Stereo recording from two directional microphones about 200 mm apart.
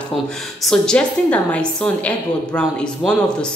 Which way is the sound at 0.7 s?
5° left (ahead or behind).